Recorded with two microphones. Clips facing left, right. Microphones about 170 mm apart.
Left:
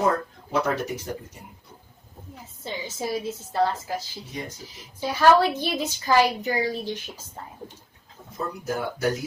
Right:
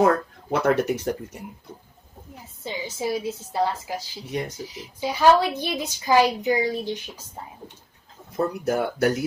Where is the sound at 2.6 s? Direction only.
10° right (ahead or behind).